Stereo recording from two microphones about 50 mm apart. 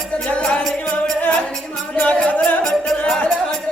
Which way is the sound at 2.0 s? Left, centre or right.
Left.